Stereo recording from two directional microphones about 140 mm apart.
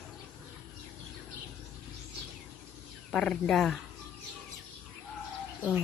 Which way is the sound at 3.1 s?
5° left (ahead or behind).